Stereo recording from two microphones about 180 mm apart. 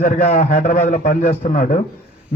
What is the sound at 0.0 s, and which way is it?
A man's voice, 50° left (ahead or behind).